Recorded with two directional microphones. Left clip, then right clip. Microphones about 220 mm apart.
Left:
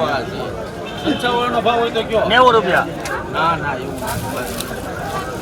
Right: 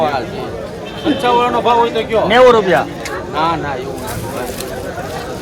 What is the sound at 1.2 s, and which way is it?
Speech, 35° right (ahead or behind).